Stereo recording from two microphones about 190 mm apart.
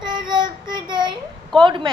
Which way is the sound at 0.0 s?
25° right (ahead or behind).